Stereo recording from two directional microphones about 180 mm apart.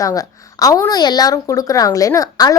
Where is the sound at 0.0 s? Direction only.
20° left (ahead or behind).